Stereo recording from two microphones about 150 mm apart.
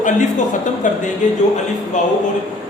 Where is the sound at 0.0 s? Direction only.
55° left (ahead or behind).